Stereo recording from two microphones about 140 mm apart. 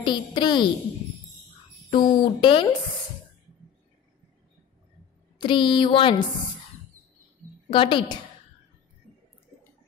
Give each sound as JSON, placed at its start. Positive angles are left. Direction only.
{"t": 0.0, "sound": "speech", "side_deg": 35}
{"t": 1.9, "sound": "speech", "side_deg": 35}
{"t": 5.4, "sound": "speech", "side_deg": 35}
{"t": 7.7, "sound": "speech", "side_deg": 40}